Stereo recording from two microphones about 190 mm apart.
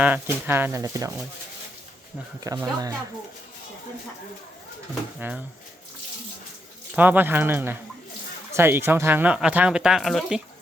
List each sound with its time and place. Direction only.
0.0 s speech: 10° right (ahead or behind)
2.4 s speech: 15° right (ahead or behind)
5.2 s speech: 10° right (ahead or behind)
6.9 s speech: 10° right (ahead or behind)